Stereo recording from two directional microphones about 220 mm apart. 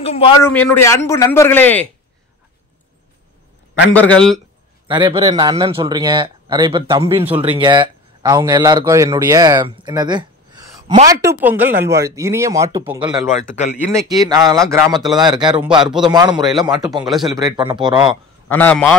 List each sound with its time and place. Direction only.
0.0 s a man's voice: 25° left (ahead or behind)
0.4 s speech: 10° left (ahead or behind)
3.9 s speech: 5° left (ahead or behind)
4.8 s speech: 20° right (ahead or behind)
15.8 s speech: centre (ahead or behind)
16.1 s speech: 20° right (ahead or behind)
18.5 s speech: 5° left (ahead or behind)